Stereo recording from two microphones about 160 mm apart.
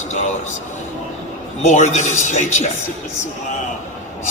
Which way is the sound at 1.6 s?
50° left (ahead or behind).